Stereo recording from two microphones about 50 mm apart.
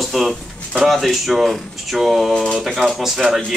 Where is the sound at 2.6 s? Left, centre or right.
Centre.